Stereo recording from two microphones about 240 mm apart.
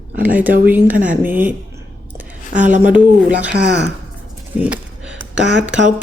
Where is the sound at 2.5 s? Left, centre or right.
Right.